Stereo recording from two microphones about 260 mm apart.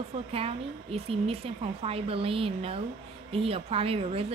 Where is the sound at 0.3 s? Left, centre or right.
Right.